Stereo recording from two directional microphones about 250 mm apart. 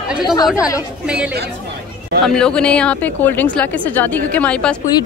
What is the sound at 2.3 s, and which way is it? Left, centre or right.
A woman's voice, centre.